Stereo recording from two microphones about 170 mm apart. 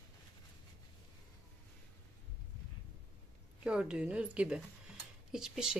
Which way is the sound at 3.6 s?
5° right (ahead or behind).